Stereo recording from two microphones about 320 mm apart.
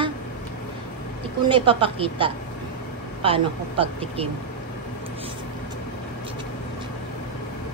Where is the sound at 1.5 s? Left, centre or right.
Centre.